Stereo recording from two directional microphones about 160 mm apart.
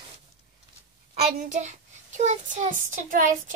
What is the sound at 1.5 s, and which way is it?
A child's voice, 45° right (ahead or behind).